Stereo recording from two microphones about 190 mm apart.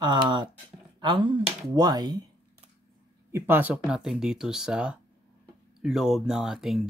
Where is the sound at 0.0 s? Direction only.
25° right (ahead or behind).